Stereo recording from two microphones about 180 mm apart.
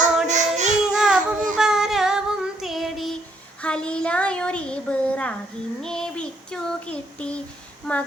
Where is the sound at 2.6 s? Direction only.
Centre (ahead or behind).